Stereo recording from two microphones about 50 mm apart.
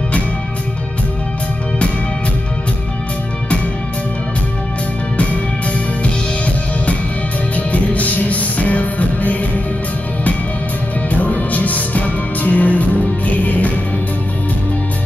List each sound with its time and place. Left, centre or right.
5.1 s music: left
7.5 s music: left
11.1 s music: left